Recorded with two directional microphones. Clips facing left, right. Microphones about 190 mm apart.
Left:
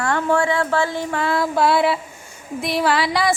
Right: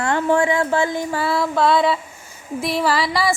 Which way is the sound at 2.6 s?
Centre (ahead or behind).